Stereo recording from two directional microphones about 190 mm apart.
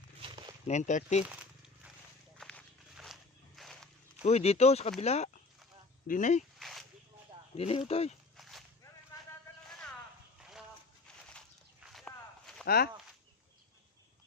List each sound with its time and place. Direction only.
0.2 s a sound: 25° right (ahead or behind)
0.7 s speech: 40° left (ahead or behind)
2.4 s walk: 5° left (ahead or behind)
4.2 s speech: 35° left (ahead or behind)
6.6 s a sound: centre (ahead or behind)
7.5 s speech: 30° left (ahead or behind)
8.4 s walk: centre (ahead or behind)
11.3 s walk: centre (ahead or behind)
12.6 s speech: 55° left (ahead or behind)